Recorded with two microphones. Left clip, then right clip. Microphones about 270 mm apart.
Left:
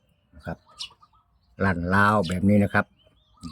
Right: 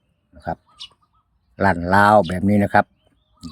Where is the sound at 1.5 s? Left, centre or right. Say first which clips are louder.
Right 7 dB; centre.